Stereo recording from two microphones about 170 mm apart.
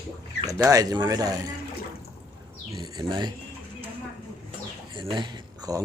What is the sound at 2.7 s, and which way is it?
Speech, 25° right (ahead or behind).